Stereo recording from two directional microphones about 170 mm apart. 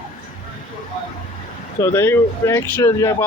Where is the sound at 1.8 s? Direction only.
15° left (ahead or behind).